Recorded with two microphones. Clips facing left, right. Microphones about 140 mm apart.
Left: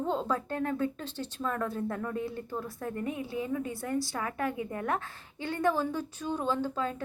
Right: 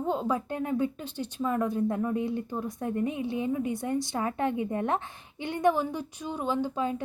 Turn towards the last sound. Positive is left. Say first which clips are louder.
# right 2 dB
turn(degrees=-15)  # may be behind; listen again after turning